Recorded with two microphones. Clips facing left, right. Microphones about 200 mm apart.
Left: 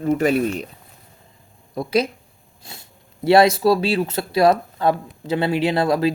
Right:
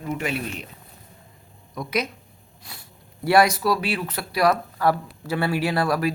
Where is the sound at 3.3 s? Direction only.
25° left (ahead or behind).